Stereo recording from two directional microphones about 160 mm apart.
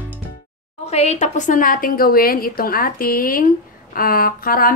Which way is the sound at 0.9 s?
45° left (ahead or behind).